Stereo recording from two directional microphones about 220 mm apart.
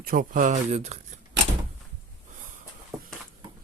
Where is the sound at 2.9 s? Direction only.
Centre (ahead or behind).